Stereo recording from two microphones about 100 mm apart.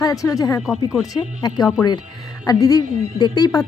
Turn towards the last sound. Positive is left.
turn(degrees=40)  # may be behind; listen again after turning